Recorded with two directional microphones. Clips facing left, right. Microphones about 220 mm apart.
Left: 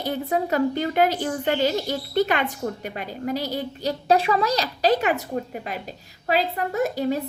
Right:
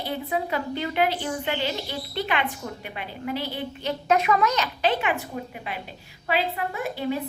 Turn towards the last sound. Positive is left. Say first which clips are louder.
# left 5 dB
turn(degrees=40)  # may be behind; listen again after turning